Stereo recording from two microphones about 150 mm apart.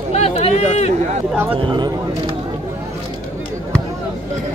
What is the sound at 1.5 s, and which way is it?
Speech, 35° right (ahead or behind).